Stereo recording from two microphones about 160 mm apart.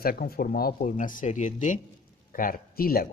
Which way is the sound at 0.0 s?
70° left (ahead or behind).